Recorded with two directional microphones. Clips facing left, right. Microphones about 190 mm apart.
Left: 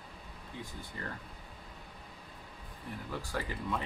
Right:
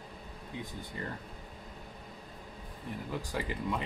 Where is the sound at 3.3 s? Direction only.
15° right (ahead or behind).